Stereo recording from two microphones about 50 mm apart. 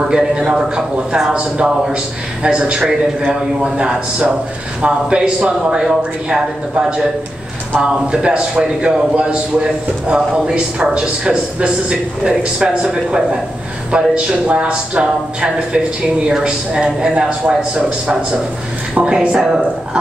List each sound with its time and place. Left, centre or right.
0.1 s a man's voice: centre